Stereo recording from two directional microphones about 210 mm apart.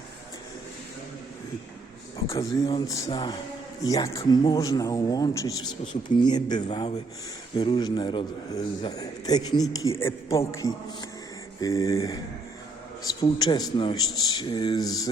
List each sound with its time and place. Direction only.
2.3 s a man's voice: 15° left (ahead or behind)
13.4 s a man's voice: 20° left (ahead or behind)